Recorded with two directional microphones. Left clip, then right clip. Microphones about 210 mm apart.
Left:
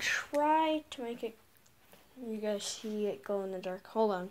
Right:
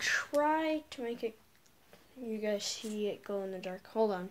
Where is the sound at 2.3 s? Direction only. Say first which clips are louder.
Right 1 dB; 10° right (ahead or behind).